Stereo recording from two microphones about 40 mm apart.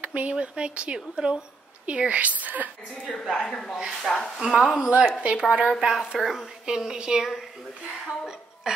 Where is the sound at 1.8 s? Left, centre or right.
Right.